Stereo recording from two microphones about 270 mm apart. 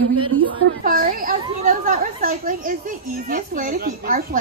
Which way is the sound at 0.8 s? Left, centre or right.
Right.